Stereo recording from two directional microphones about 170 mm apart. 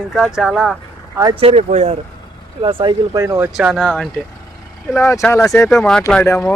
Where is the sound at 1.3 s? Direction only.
35° right (ahead or behind).